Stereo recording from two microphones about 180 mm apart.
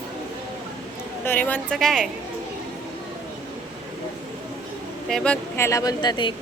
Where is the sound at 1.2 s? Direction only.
10° left (ahead or behind).